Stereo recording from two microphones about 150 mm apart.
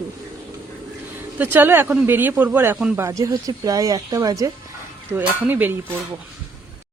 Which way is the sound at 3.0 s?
20° right (ahead or behind).